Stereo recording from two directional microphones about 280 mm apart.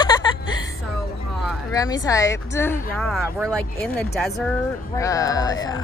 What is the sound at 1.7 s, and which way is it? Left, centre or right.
Speech, centre.